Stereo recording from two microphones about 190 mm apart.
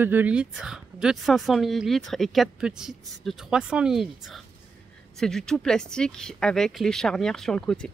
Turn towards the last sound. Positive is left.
turn(degrees=5)  # may be behind; listen again after turning